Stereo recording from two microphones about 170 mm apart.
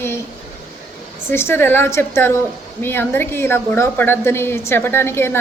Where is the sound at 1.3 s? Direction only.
15° left (ahead or behind).